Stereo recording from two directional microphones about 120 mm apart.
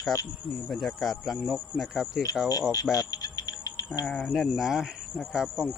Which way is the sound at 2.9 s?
30° left (ahead or behind).